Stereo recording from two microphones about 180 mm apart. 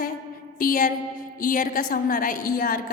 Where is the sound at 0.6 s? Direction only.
50° left (ahead or behind).